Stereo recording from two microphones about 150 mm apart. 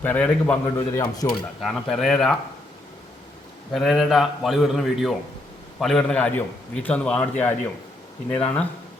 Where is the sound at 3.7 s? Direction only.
Centre (ahead or behind).